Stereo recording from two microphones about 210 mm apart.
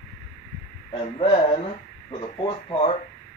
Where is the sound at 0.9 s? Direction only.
25° left (ahead or behind).